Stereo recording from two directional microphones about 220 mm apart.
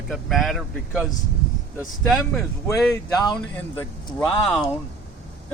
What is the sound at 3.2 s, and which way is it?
Speech, 20° left (ahead or behind).